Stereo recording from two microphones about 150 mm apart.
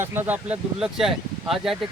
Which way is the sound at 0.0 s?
15° right (ahead or behind).